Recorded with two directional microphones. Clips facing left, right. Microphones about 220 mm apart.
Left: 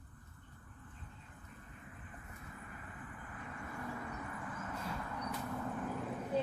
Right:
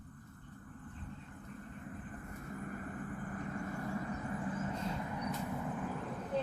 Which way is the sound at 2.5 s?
45° right (ahead or behind).